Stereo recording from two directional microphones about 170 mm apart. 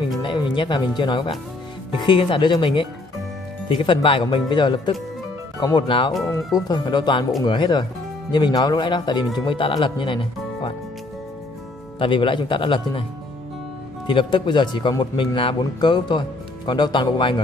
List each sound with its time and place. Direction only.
0.2 s speech: 30° left (ahead or behind)
12.0 s speech: 30° left (ahead or behind)
14.0 s speech: 30° left (ahead or behind)